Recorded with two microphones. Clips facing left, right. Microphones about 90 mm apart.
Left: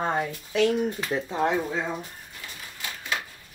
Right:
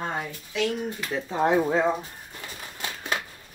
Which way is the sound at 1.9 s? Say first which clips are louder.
Right 1 dB; 30° right (ahead or behind).